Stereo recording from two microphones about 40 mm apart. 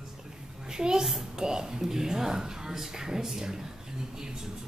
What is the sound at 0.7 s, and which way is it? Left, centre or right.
Speech, centre.